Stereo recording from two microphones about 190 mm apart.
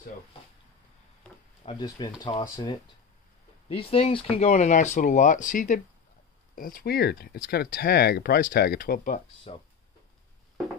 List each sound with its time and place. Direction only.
1.7 s speech: 25° left (ahead or behind); by 9.2 s 50° left (ahead or behind)